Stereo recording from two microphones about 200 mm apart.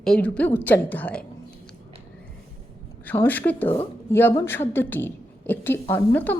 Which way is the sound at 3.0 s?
10° left (ahead or behind).